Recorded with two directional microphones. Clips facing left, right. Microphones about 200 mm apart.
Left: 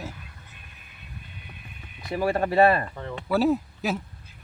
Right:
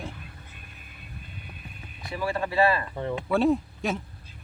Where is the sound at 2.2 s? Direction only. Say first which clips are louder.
Left 4 dB; 50° left (ahead or behind).